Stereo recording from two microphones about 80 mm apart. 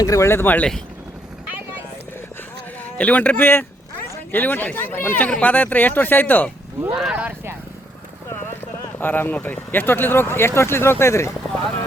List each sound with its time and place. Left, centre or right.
0.0 s speech: left
0.3 s speech: left
2.8 s speech: left
6.9 s speech: centre
8.3 s a sound: left
9.0 s speech: left